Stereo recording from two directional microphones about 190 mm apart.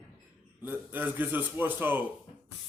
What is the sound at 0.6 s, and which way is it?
A man's voice, 10° right (ahead or behind).